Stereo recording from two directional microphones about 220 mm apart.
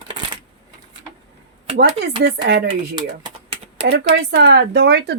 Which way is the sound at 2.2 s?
50° right (ahead or behind).